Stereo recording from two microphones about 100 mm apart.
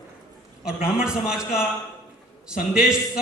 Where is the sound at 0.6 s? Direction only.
10° right (ahead or behind).